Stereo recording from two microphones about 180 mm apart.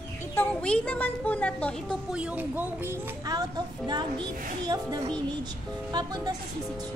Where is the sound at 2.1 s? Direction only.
5° right (ahead or behind).